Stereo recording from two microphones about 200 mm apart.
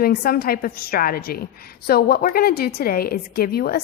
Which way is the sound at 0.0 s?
50° left (ahead or behind).